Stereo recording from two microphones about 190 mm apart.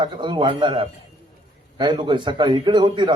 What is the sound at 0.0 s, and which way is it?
A man's voice, 25° right (ahead or behind).